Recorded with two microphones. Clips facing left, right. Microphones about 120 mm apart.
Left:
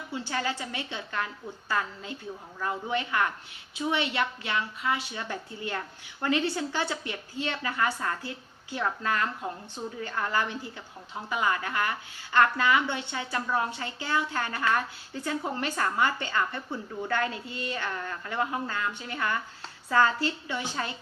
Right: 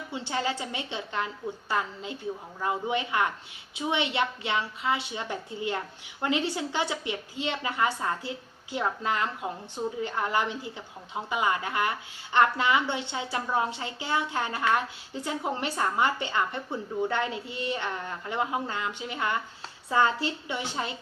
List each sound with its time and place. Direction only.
0.1 s a woman's voice: 25° right (ahead or behind)